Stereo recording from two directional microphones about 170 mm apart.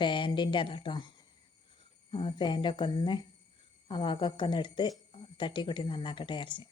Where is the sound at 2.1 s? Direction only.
30° left (ahead or behind).